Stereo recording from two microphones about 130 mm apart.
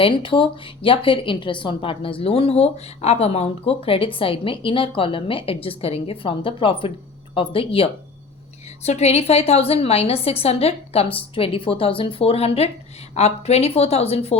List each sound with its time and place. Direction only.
0.0 s a woman's voice: 40° left (ahead or behind)
8.8 s a woman's voice: 55° left (ahead or behind)